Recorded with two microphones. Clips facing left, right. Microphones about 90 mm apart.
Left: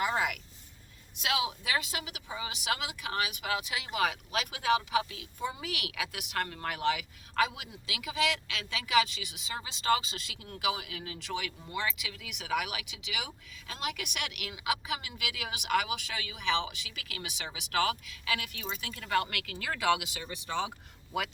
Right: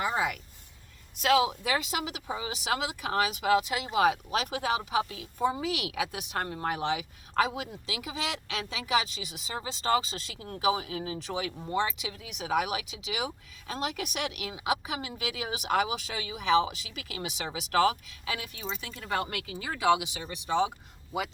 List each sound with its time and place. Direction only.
1.2 s speech: 40° right (ahead or behind); by 21.2 s 20° right (ahead or behind)